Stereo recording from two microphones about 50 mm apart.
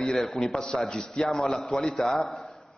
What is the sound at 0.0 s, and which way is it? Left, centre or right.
A man's voice, centre.